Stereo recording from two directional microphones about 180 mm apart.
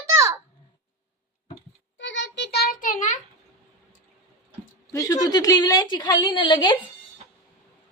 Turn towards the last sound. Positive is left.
turn(degrees=25)  # may be behind; listen again after turning